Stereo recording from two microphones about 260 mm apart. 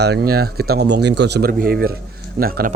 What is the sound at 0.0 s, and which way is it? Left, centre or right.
Speech, right.